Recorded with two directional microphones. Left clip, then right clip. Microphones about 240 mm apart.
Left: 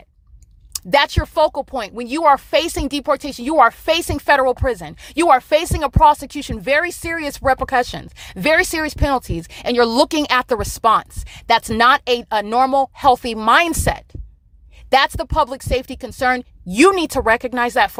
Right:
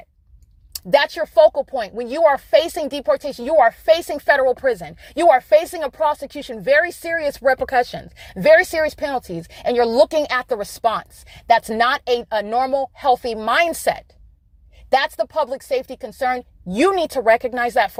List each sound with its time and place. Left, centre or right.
0.7 s speech: centre